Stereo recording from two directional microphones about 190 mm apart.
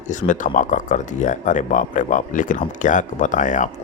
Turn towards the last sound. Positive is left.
turn(degrees=40)  # may be behind; listen again after turning